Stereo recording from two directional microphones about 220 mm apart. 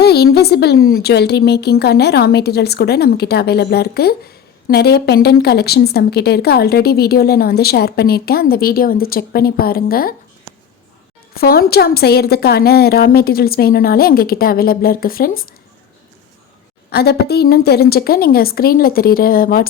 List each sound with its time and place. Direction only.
0.0 s a woman's voice: 45° left (ahead or behind)
11.3 s a woman's voice: 45° left (ahead or behind)
16.9 s a woman's voice: 45° left (ahead or behind)